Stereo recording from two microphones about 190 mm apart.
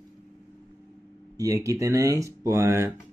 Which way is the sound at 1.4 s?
15° right (ahead or behind).